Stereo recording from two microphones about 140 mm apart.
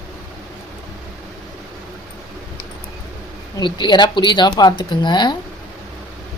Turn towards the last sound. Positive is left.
turn(degrees=35)  # may be behind; listen again after turning